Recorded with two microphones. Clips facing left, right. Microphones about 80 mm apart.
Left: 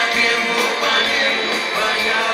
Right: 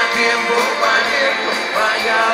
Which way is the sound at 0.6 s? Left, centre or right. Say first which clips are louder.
Right 3 dB; right.